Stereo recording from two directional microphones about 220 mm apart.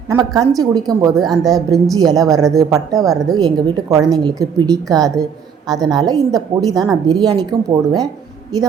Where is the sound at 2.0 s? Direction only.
15° right (ahead or behind).